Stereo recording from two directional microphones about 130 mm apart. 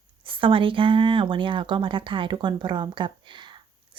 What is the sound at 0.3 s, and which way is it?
Speech, 40° right (ahead or behind).